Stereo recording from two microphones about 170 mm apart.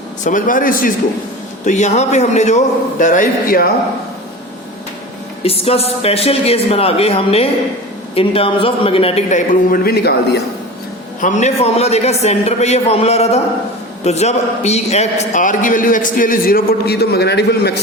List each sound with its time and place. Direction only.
0.3 s a man's voice: 50° left (ahead or behind)
1.6 s a man's voice: 45° left (ahead or behind)
5.4 s a man's voice: 35° left (ahead or behind); by 10.4 s 70° left (ahead or behind)
11.2 s a man's voice: 45° left (ahead or behind); by 17.7 s 75° left (ahead or behind)